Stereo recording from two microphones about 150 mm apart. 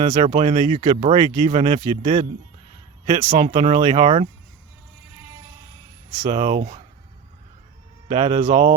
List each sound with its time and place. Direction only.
0.0 s speech: 35° right (ahead or behind)
3.3 s speech: 35° right (ahead or behind)
6.2 s speech: 35° right (ahead or behind)
8.1 s speech: 35° right (ahead or behind)